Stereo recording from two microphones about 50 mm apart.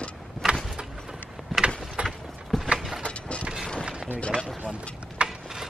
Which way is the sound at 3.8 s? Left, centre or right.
Centre.